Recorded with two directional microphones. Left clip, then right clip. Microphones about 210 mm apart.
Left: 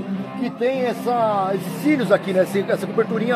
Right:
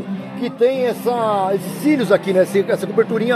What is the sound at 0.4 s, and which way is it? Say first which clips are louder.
Speech: right 5 dB; 50° right (ahead or behind).